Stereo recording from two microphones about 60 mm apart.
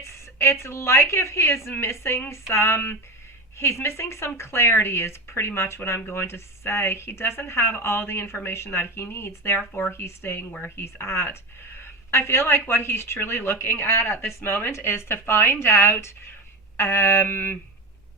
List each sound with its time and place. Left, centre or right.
0.0 s a woman's voice: left
9.6 s speech: left
9.9 s speech: left
10.6 s a sound: left
11.8 s speech: left
16.7 s a sound: left